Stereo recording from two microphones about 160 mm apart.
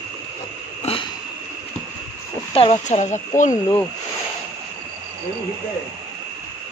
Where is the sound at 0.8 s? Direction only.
35° left (ahead or behind).